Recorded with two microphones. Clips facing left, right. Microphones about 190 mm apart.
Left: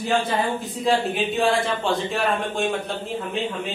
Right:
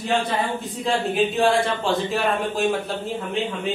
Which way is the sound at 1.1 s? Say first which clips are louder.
Right 2 dB; centre (ahead or behind).